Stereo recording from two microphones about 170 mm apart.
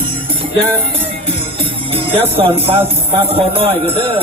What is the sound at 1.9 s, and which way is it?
Speech, 30° right (ahead or behind).